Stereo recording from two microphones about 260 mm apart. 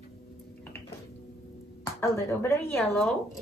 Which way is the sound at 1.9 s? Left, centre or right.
Centre.